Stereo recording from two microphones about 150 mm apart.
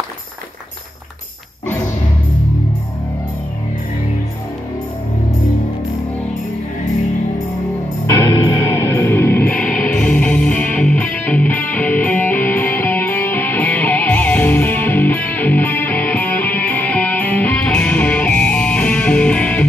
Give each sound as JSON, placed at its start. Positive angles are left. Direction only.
{"t": 8.1, "sound": "music", "side_deg": 20}